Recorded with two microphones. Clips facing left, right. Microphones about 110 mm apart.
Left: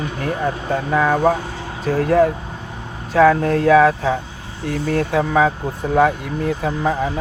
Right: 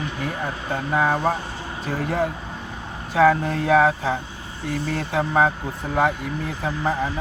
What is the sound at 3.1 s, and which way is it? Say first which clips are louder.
Speech: left 4 dB; 60° left (ahead or behind).